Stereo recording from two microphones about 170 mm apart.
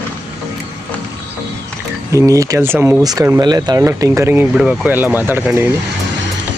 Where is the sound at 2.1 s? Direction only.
20° right (ahead or behind).